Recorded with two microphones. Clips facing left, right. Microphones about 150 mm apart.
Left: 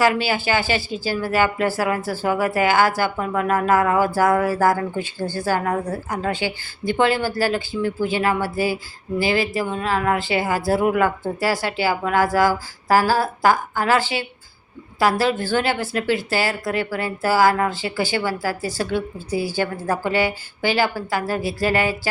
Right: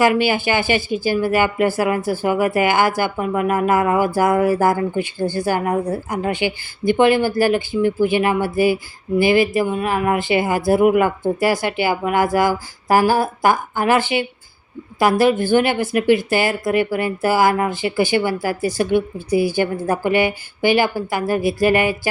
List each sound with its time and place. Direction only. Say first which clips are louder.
0.0 s speech: right 3 dB; 15° right (ahead or behind)